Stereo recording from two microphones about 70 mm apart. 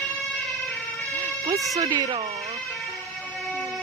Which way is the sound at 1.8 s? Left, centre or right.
Right.